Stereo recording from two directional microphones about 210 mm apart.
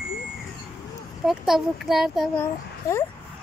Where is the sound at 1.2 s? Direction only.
Centre (ahead or behind).